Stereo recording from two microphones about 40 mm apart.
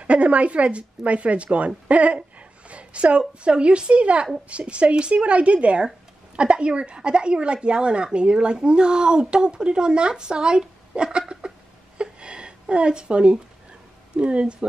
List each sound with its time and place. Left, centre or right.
0.0 s a woman's voice: right
12.0 s a sound: right
14.1 s speech: right